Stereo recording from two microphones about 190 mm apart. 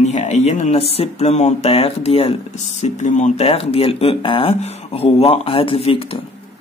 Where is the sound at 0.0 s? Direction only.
35° left (ahead or behind).